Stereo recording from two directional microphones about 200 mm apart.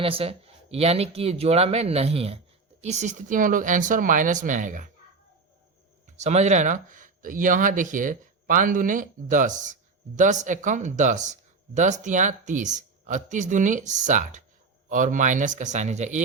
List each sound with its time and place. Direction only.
0.0 s speech: 30° right (ahead or behind)
6.1 s speech: 35° right (ahead or behind)